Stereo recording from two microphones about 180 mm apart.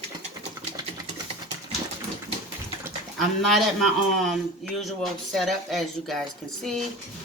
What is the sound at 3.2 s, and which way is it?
A man's voice, centre (ahead or behind).